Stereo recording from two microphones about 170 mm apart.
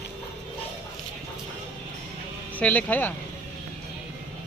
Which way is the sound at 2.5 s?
10° left (ahead or behind).